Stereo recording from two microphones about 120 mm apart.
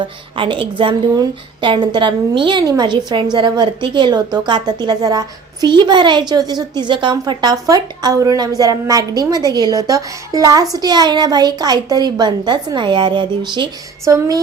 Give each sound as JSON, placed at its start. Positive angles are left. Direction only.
{"t": 0.0, "sound": "speech", "side_deg": -45}
{"t": 14.0, "sound": "speech", "side_deg": -30}